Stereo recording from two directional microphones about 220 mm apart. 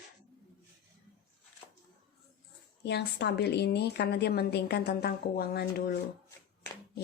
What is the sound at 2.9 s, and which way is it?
A woman's voice, 50° left (ahead or behind).